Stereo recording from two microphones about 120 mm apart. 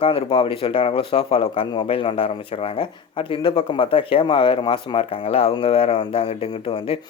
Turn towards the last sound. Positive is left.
turn(degrees=55)  # may be behind; listen again after turning